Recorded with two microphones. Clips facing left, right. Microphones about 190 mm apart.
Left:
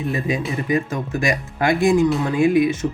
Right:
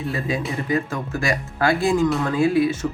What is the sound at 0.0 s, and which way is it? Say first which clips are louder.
Speech: left 2 dB; 15° left (ahead or behind).